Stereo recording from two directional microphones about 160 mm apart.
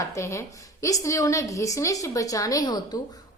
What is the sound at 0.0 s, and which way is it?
A woman's voice, 20° left (ahead or behind).